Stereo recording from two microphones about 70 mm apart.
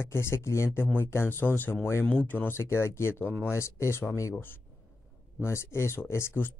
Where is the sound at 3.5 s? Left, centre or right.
Left.